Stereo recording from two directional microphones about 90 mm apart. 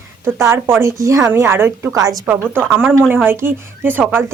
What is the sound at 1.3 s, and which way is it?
Speech, 25° right (ahead or behind).